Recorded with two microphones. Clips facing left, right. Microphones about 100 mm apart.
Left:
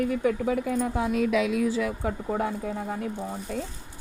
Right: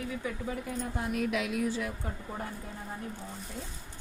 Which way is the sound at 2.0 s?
90° left.